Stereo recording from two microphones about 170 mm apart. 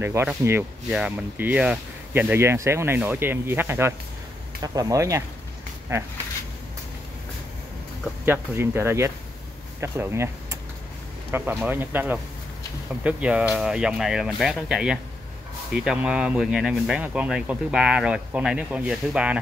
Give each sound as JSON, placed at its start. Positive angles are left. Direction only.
{"t": 0.0, "sound": "speech", "side_deg": -15}
{"t": 8.3, "sound": "speech", "side_deg": -15}